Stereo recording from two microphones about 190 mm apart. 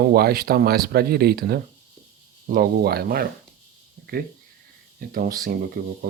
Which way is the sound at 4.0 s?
55° right (ahead or behind).